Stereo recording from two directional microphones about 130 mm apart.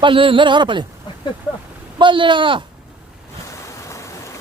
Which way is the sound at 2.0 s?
40° right (ahead or behind).